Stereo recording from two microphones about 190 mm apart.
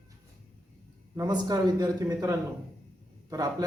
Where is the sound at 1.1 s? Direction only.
20° right (ahead or behind).